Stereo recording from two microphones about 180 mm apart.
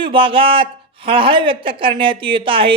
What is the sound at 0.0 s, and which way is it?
A woman's voice, 30° right (ahead or behind).